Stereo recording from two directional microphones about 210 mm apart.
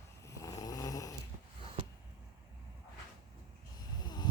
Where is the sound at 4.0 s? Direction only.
20° left (ahead or behind).